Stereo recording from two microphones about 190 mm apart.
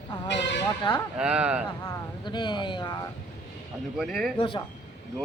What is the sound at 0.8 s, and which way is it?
Speech, 25° left (ahead or behind).